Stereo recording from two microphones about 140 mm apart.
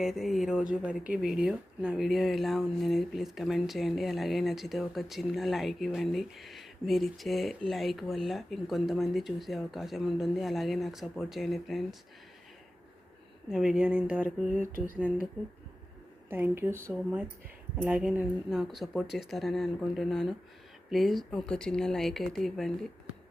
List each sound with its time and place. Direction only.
0.0 s speech: centre (ahead or behind)
13.5 s speech: 5° right (ahead or behind)
16.3 s speech: 15° right (ahead or behind); by 22.9 s centre (ahead or behind)